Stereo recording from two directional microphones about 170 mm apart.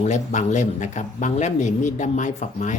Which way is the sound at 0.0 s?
45° left (ahead or behind).